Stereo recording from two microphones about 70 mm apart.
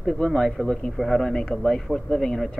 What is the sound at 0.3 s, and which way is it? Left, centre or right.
Speech, centre.